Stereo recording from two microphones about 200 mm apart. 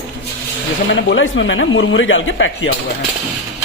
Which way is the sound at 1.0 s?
65° left (ahead or behind).